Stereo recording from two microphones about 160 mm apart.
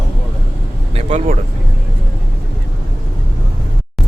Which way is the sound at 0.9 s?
45° right (ahead or behind).